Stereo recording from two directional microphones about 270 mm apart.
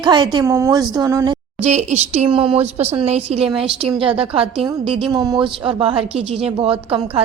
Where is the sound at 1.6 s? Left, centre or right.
Right.